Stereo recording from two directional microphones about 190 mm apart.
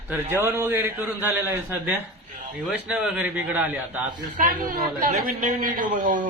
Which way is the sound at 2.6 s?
5° right (ahead or behind).